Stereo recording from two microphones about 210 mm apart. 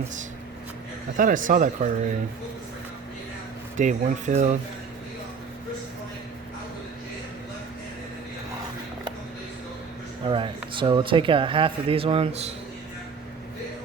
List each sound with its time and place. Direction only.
1.1 s speech: 40° right (ahead or behind)
3.8 s speech: 35° right (ahead or behind)
10.2 s speech: 25° right (ahead or behind)